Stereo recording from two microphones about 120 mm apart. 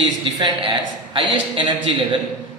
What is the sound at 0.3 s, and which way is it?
A man's voice, 40° right (ahead or behind).